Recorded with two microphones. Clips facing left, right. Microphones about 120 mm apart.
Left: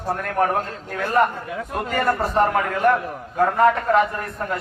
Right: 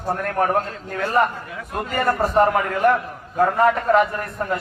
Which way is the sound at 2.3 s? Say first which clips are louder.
Right 2 dB; 5° right (ahead or behind).